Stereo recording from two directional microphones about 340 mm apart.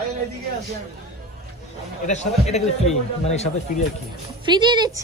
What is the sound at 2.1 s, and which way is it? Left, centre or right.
A man's voice, centre.